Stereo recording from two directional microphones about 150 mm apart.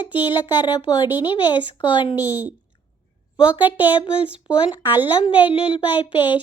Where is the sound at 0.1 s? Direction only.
30° left (ahead or behind).